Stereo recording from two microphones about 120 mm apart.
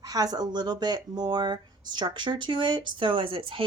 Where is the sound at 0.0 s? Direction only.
30° right (ahead or behind).